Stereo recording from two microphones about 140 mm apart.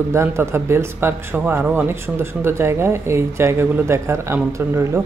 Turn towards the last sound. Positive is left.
turn(degrees=-20)  # may be behind; listen again after turning